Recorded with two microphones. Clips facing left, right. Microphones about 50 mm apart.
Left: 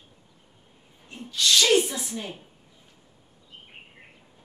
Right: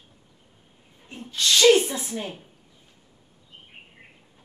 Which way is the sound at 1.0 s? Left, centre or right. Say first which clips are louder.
Even; right.